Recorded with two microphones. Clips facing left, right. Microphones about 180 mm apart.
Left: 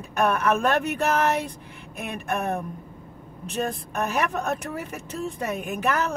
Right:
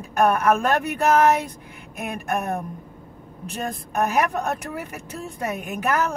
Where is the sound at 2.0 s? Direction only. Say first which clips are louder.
Right 2 dB; 60° right (ahead or behind).